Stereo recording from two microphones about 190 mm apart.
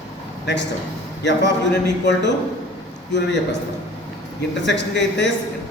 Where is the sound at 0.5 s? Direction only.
65° left (ahead or behind).